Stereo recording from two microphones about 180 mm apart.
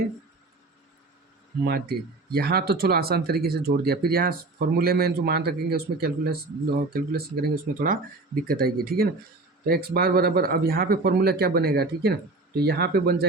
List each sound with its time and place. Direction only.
1.6 s speech: 60° right (ahead or behind)